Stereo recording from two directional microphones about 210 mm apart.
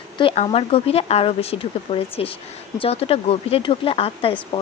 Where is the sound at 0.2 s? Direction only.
25° left (ahead or behind).